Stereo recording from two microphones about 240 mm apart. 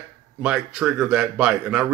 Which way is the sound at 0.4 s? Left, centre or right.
Centre.